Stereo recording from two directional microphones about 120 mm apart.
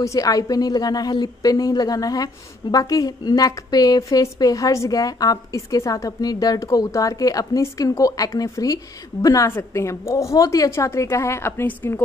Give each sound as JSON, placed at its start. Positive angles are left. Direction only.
{"t": 0.0, "sound": "a woman's voice", "side_deg": 30}